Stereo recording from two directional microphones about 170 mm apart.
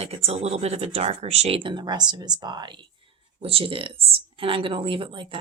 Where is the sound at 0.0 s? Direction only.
40° right (ahead or behind).